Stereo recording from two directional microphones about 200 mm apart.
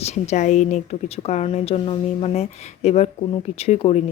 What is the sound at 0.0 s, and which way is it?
A woman's voice, 35° left (ahead or behind).